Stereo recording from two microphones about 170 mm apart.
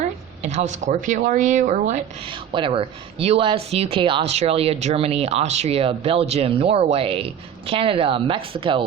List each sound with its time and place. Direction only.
0.4 s speech: 45° right (ahead or behind)
2.5 s speech: 30° right (ahead or behind)